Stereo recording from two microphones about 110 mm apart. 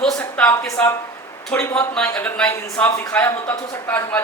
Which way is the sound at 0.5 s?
25° left (ahead or behind).